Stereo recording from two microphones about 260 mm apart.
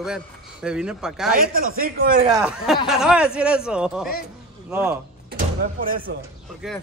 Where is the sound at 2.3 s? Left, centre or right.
Centre.